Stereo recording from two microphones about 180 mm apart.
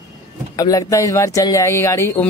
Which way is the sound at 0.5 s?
20° left (ahead or behind).